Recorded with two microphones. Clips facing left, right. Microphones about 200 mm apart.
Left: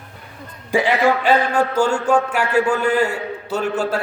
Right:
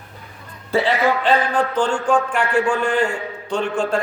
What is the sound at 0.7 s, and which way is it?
A man's voice, 15° left (ahead or behind).